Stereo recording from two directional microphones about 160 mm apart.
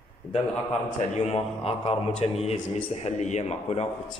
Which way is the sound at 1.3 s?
40° left (ahead or behind).